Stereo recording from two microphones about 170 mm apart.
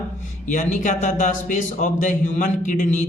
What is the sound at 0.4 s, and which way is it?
Speech, 45° left (ahead or behind).